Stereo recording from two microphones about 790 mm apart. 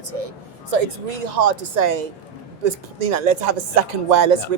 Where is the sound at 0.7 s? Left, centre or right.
Right.